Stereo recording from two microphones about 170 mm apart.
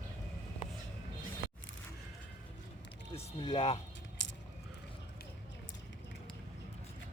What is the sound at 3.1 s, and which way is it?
Speech, 35° left (ahead or behind).